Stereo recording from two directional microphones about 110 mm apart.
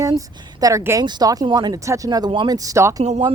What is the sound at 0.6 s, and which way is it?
Speech, 25° right (ahead or behind).